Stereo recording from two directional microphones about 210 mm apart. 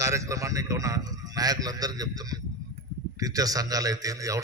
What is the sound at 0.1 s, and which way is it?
A man's voice, 15° right (ahead or behind).